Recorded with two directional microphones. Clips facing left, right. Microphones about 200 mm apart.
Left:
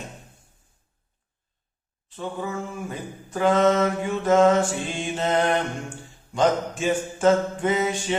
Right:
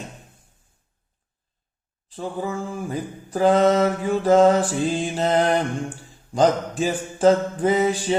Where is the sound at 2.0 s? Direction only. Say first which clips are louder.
Right 3 dB; 30° right (ahead or behind).